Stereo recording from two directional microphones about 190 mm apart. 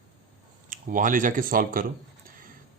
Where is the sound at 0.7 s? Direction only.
45° right (ahead or behind).